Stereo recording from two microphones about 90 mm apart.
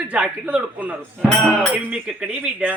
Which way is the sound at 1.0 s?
10° left (ahead or behind).